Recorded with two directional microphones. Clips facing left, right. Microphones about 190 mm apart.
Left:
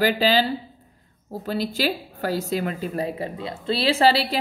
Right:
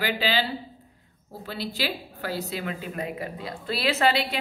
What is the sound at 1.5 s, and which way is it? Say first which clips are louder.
A woman's voice: left 6 dB; 45° left (ahead or behind).